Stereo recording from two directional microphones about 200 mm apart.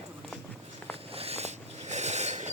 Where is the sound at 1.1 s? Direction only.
30° right (ahead or behind).